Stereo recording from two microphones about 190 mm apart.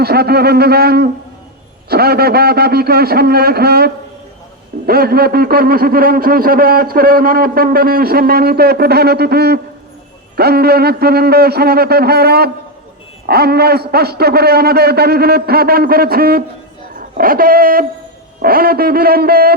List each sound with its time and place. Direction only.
0.0 s a man's voice: 55° right (ahead or behind)